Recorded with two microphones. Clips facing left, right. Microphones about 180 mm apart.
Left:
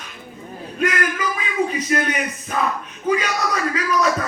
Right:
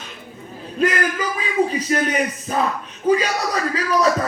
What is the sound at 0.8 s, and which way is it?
Speech, 30° right (ahead or behind).